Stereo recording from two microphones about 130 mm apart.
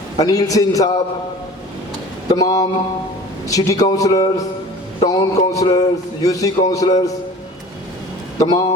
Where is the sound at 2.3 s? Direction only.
25° left (ahead or behind).